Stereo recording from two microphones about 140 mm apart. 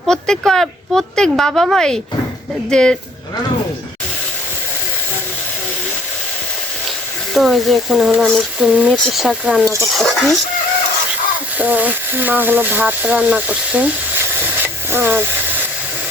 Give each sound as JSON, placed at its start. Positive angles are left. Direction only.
{"t": 0.1, "sound": "speech", "side_deg": 5}
{"t": 7.3, "sound": "speech", "side_deg": 0}
{"t": 11.5, "sound": "speech", "side_deg": -10}